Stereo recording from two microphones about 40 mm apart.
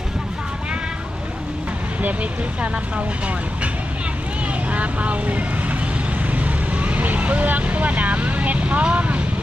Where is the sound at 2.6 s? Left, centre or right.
Right.